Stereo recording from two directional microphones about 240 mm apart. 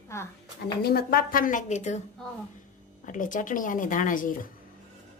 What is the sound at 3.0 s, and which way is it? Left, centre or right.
Speech, left.